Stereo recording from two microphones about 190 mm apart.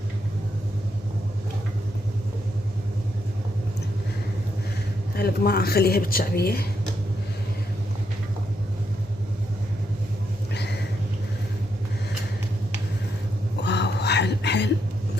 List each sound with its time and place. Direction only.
5.1 s speech: 55° left (ahead or behind)
10.5 s vehicle: 60° left (ahead or behind)
13.6 s a sound: 65° left (ahead or behind)